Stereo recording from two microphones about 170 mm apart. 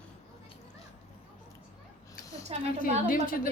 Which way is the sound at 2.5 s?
35° right (ahead or behind).